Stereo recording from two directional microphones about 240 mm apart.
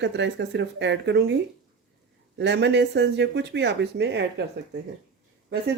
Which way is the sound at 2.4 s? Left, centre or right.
Right.